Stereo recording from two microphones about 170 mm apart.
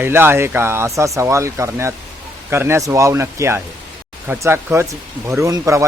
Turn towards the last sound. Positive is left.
turn(degrees=-20)  # may be behind; listen again after turning